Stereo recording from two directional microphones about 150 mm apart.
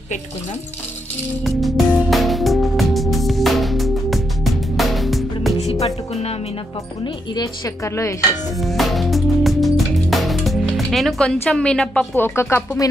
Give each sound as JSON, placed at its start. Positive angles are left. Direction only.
{"t": 1.4, "sound": "music", "side_deg": 0}
{"t": 5.6, "sound": "music", "side_deg": 45}
{"t": 7.3, "sound": "speech", "side_deg": 20}
{"t": 8.5, "sound": "music", "side_deg": 0}